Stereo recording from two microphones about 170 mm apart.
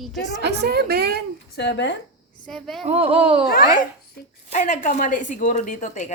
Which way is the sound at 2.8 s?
35° right (ahead or behind).